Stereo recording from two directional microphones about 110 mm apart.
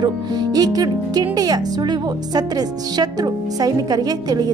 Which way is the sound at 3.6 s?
35° right (ahead or behind).